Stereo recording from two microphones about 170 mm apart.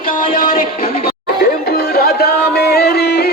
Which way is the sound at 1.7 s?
65° left (ahead or behind).